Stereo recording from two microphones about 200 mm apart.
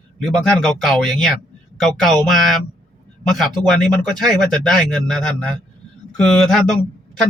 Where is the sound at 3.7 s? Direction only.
Centre (ahead or behind).